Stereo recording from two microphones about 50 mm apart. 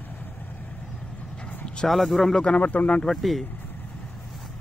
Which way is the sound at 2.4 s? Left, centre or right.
Left.